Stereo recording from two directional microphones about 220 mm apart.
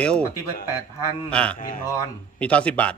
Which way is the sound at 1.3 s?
5° left (ahead or behind).